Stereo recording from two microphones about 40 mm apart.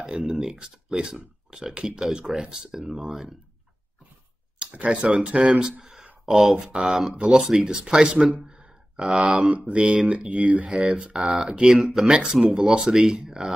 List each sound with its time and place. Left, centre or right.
0.3 s speech: centre
4.7 s speech: right; by 6.0 s centre
6.0 s a sound: right
6.5 s speech: centre
8.2 s speech: centre
8.5 s a sound: right
9.6 s speech: right
11.2 s speech: centre
12.6 s speech: right